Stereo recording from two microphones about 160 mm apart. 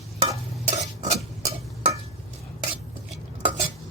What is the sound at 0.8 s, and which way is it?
Stir, 45° right (ahead or behind).